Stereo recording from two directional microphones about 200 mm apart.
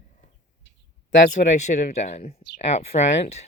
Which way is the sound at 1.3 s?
35° left (ahead or behind).